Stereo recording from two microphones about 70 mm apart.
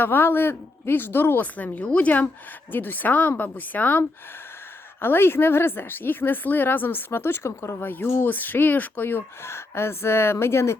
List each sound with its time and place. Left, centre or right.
0.0 s a woman's voice: left